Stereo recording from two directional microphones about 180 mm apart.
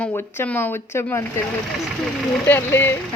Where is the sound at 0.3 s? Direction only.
10° left (ahead or behind).